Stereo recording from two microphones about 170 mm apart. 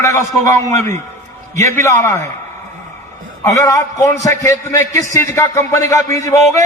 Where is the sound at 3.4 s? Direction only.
20° left (ahead or behind).